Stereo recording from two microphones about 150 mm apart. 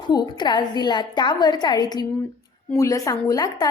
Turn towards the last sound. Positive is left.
turn(degrees=25)  # may be behind; listen again after turning